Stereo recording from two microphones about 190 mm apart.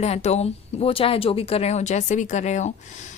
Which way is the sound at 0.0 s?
35° left (ahead or behind).